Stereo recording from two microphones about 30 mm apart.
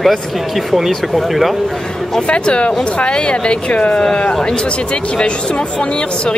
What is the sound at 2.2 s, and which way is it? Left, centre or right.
Speech, left.